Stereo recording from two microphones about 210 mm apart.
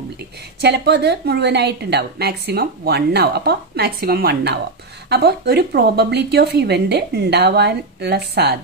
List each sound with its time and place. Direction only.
0.6 s a woman's voice: 50° right (ahead or behind)